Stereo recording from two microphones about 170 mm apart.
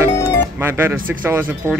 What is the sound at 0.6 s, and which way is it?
Speech, 15° right (ahead or behind).